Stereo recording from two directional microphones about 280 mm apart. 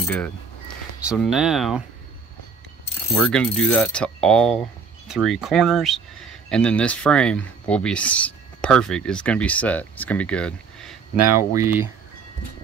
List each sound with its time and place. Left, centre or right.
0.0 s speech: centre
3.2 s mechanisms: centre
3.7 s speech: centre
11.2 s speech: centre